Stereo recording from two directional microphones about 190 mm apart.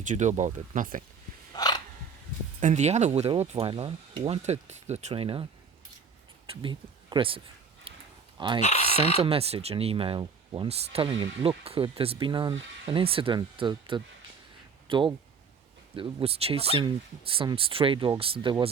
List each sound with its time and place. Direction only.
0.0 s speech: 40° right (ahead or behind)
1.5 s a sound: 20° left (ahead or behind)
2.6 s speech: 40° right (ahead or behind)
6.5 s speech: 25° right (ahead or behind)
7.9 s a sound: 30° right (ahead or behind)
8.4 s speech: 25° right (ahead or behind)
8.6 s chicken: 35° left (ahead or behind)
9.1 s speech: 30° right (ahead or behind)